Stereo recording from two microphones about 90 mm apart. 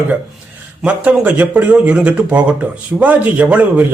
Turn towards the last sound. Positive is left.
turn(degrees=-15)  # may be behind; listen again after turning